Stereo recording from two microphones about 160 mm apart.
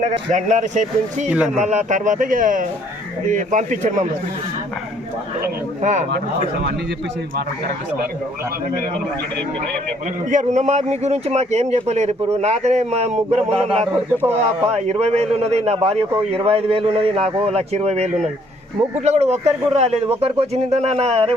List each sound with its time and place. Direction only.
0.3 s a man's voice: 50° right (ahead or behind)
5.8 s a man's voice: 50° right (ahead or behind)
10.2 s a man's voice: 50° right (ahead or behind)
13.9 s a man's voice: 10° right (ahead or behind)
14.8 s a man's voice: 45° right (ahead or behind)